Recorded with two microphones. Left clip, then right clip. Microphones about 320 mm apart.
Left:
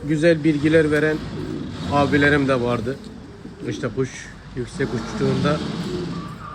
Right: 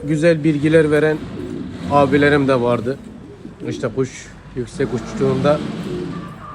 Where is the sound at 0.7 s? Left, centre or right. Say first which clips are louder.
Right 4 dB; right.